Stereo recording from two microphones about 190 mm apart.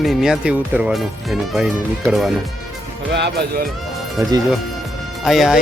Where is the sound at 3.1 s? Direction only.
65° right (ahead or behind).